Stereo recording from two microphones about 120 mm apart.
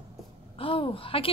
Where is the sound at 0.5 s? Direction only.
50° left (ahead or behind).